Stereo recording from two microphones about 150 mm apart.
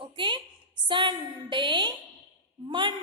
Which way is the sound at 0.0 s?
35° right (ahead or behind).